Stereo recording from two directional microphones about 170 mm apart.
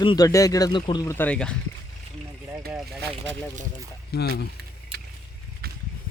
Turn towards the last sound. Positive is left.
turn(degrees=80)